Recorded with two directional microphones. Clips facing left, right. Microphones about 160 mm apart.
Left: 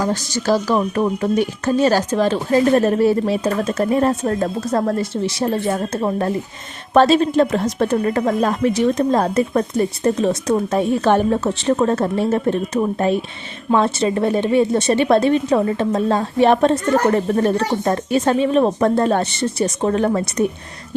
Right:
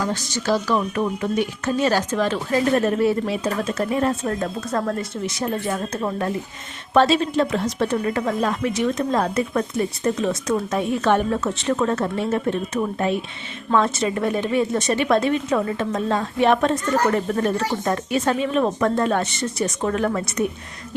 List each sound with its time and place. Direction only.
0.0 s speech: 35° left (ahead or behind)